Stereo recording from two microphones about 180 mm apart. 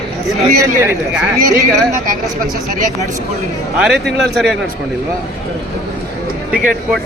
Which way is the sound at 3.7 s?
5° right (ahead or behind).